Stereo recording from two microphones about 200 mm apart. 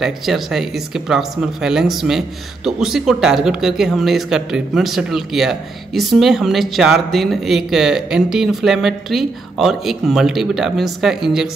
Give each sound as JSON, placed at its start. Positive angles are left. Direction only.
{"t": 0.0, "sound": "speech", "side_deg": 0}